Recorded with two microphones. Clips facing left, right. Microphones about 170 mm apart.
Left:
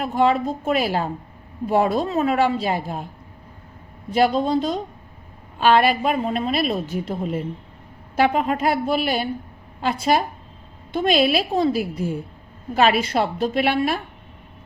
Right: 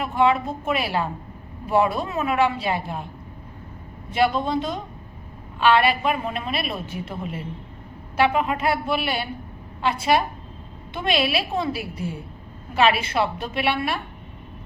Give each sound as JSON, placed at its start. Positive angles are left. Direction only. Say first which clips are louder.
{"t": 0.1, "sound": "a woman's voice", "louder": "left 1 dB", "side_deg": 40}
{"t": 4.1, "sound": "a woman's voice", "louder": "left 3 dB", "side_deg": 40}